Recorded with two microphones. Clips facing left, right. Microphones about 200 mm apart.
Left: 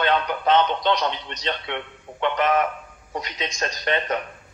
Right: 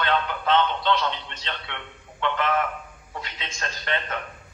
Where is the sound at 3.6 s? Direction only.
15° left (ahead or behind).